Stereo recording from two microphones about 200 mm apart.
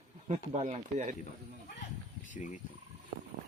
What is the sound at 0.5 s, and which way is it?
Speech, 35° right (ahead or behind).